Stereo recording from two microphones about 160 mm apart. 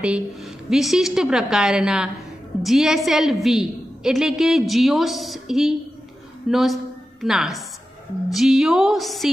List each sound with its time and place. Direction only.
0.0 s a woman's voice: 5° right (ahead or behind)